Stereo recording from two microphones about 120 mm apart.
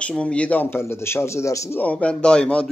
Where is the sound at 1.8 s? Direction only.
10° left (ahead or behind).